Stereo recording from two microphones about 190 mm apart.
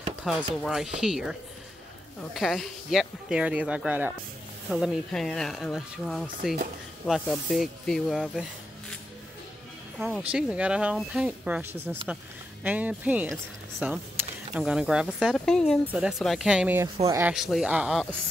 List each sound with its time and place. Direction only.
0.2 s speech: centre (ahead or behind)
2.3 s speech: centre (ahead or behind)
9.9 s speech: 5° right (ahead or behind)
17.3 s speech: centre (ahead or behind)